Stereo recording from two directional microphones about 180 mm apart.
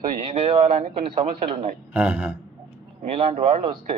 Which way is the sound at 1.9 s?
10° right (ahead or behind).